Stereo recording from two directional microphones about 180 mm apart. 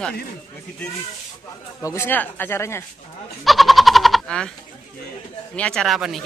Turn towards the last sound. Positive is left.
turn(degrees=0)  # may be behind; listen again after turning